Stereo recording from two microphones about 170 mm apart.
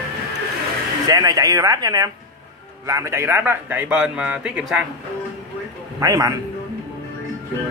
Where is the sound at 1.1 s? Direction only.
20° right (ahead or behind); by 4.8 s 5° right (ahead or behind).